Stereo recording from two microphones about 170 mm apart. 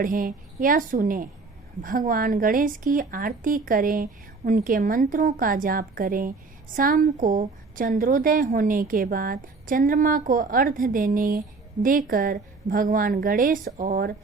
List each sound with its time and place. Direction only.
0.0 s a woman's voice: 55° right (ahead or behind)